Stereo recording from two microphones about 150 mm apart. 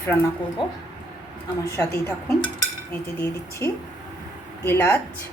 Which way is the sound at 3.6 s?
15° left (ahead or behind).